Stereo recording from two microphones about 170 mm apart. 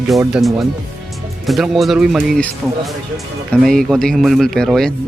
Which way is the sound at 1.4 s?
Centre (ahead or behind).